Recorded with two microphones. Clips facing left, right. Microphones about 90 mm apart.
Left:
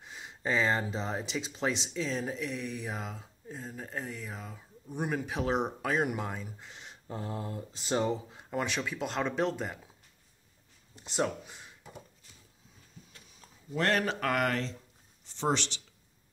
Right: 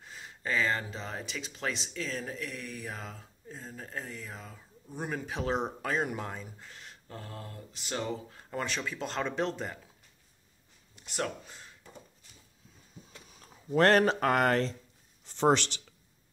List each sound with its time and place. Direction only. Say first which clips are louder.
0.0 s speech: left 3 dB; 15° left (ahead or behind)
6.6 s speech: left 1 dB; 20° left (ahead or behind)
8.4 s speech: left 2 dB; 10° left (ahead or behind)
11.0 s a sound: left 4 dB; 25° left (ahead or behind)
11.4 s a sound: left 1 dB; 15° left (ahead or behind)
13.0 s a sound: right 3 dB; 20° right (ahead or behind)
13.7 s speech: right 6 dB; 45° right (ahead or behind)
14.0 s speech: right 4 dB; 30° right (ahead or behind)
15.2 s speech: right 5 dB; 50° right (ahead or behind)